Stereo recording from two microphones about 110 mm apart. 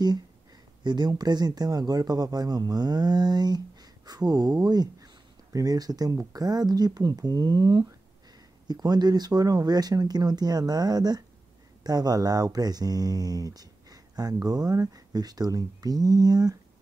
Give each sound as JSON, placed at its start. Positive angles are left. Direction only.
{"t": 0.8, "sound": "speech", "side_deg": -40}